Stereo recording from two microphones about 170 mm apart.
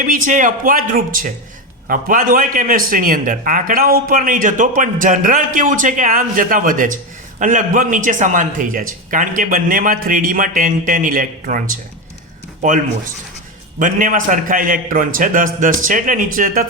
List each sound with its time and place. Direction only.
0.0 s speech: 50° right (ahead or behind)
13.7 s speech: 50° right (ahead or behind)